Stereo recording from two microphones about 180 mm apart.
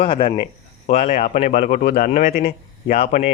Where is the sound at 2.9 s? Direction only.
35° left (ahead or behind).